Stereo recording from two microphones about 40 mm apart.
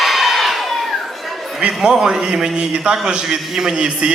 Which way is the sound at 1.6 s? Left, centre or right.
Centre.